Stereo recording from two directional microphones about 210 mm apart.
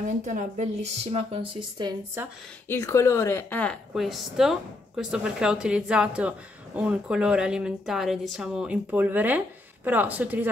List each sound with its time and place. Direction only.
0.0 s speech: 35° right (ahead or behind)
1.1 s speech: 25° right (ahead or behind)
2.7 s a woman's voice: 15° left (ahead or behind); by 10.5 s 10° right (ahead or behind)